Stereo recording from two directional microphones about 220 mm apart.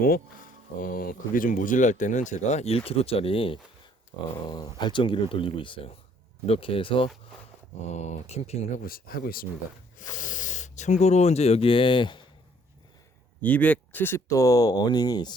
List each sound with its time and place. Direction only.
0.0 s speech: 40° left (ahead or behind)
8.8 s speech: 40° left (ahead or behind); by 12.2 s 20° left (ahead or behind)
13.4 s speech: 5° left (ahead or behind)